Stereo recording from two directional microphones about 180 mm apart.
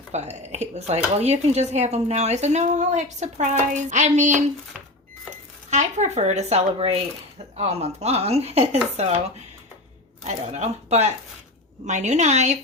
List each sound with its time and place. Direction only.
0.1 s speech: 40° right (ahead or behind)
10.2 s speech: 40° right (ahead or behind)